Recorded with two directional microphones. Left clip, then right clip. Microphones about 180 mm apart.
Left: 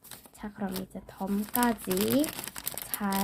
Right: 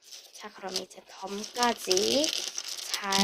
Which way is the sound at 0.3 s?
25° right (ahead or behind).